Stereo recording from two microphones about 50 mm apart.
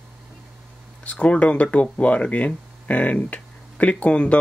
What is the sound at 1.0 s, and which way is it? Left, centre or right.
Speech, left.